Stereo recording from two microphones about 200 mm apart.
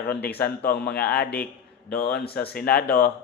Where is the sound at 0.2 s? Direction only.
10° left (ahead or behind).